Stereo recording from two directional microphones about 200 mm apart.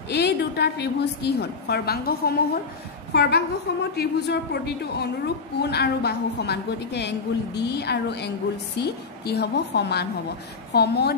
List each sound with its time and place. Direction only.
0.1 s a woman's voice: 55° left (ahead or behind)